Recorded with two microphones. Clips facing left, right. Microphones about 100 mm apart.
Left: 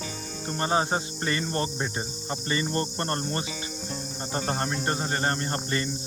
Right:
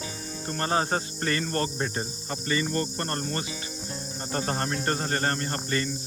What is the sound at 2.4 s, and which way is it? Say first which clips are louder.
Cricket: right 1 dB; 30° left (ahead or behind).